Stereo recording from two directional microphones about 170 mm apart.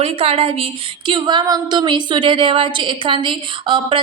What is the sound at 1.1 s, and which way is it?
A woman's voice, 25° right (ahead or behind).